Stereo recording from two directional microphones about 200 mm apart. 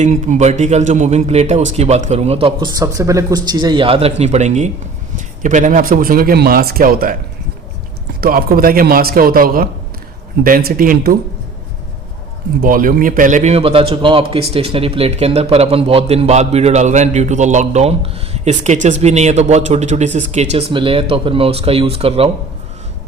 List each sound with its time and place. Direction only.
0.0 s a man's voice: 35° right (ahead or behind)
8.2 s speech: 45° right (ahead or behind)
12.6 s a man's voice: 45° right (ahead or behind)